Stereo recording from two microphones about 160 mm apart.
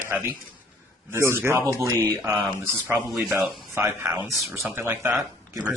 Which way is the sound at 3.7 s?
15° right (ahead or behind).